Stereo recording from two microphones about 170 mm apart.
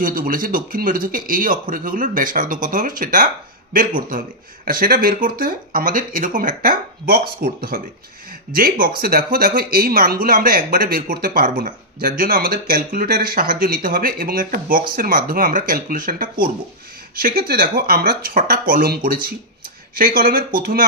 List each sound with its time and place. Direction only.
0.0 s speech: 55° right (ahead or behind)